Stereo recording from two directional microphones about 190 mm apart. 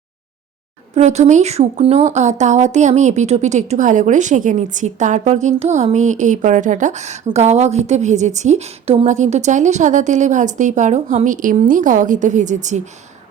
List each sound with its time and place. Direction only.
0.9 s speech: 35° right (ahead or behind)